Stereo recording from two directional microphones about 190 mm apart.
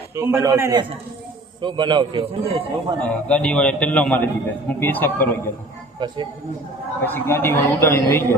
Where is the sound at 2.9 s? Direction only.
5° left (ahead or behind).